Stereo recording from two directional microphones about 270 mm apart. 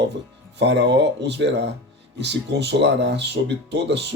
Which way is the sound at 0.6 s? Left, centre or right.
Right.